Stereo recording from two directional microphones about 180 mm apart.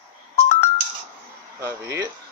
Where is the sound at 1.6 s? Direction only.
15° right (ahead or behind).